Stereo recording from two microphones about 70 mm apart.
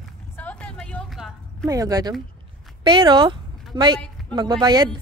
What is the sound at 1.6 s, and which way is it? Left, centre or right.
Speech, right.